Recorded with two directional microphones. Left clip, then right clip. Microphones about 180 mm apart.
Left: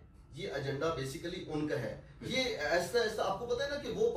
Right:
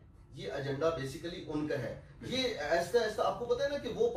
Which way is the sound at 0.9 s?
Centre (ahead or behind).